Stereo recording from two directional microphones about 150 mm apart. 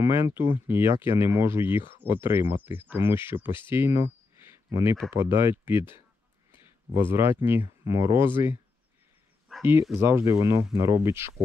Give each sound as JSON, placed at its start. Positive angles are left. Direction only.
{"t": 0.0, "sound": "speech", "side_deg": -15}
{"t": 7.1, "sound": "speech", "side_deg": -15}
{"t": 9.6, "sound": "speech", "side_deg": -15}